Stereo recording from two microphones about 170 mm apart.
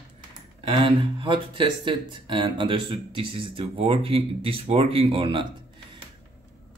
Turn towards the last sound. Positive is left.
turn(degrees=-30)  # may be behind; listen again after turning